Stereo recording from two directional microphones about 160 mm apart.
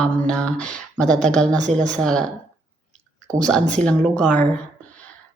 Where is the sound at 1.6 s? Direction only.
50° right (ahead or behind).